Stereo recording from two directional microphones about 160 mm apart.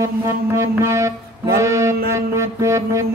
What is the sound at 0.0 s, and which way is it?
Music, 20° right (ahead or behind).